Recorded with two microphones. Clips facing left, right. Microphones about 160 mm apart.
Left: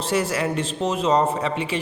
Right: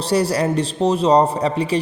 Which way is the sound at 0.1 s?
35° right (ahead or behind).